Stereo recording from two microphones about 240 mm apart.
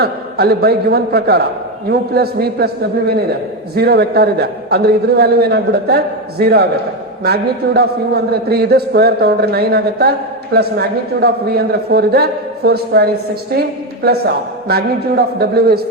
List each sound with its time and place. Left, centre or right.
0.0 s a man's voice: right
3.8 s a man's voice: right